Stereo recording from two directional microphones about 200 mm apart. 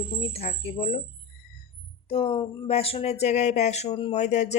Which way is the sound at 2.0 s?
30° left (ahead or behind).